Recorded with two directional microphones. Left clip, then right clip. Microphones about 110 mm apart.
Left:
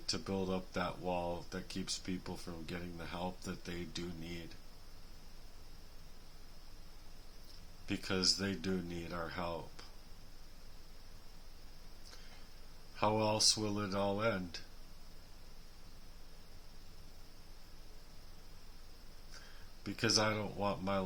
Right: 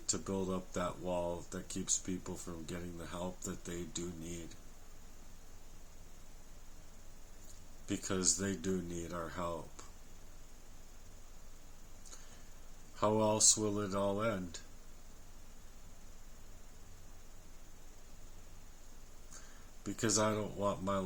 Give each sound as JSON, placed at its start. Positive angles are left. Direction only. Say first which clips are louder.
{"t": 0.0, "sound": "speech", "louder": "even", "side_deg": 20}
{"t": 7.9, "sound": "speech", "louder": "left 2 dB", "side_deg": 15}
{"t": 13.0, "sound": "speech", "louder": "right 1 dB", "side_deg": 15}
{"t": 19.8, "sound": "speech", "louder": "left 1 dB", "side_deg": 15}